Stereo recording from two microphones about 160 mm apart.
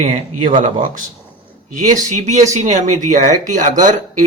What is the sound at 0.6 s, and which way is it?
Speech, 55° right (ahead or behind).